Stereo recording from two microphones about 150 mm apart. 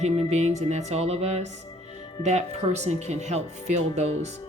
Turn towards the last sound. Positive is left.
turn(degrees=-45)  # may be behind; listen again after turning